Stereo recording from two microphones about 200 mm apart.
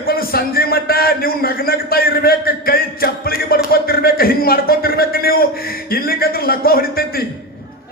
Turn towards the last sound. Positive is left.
turn(degrees=50)  # may be behind; listen again after turning